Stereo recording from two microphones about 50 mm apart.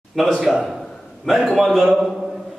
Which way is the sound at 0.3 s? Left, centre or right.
Centre.